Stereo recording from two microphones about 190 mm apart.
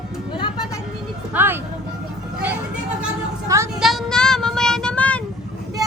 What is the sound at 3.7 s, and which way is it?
Child singing, centre (ahead or behind).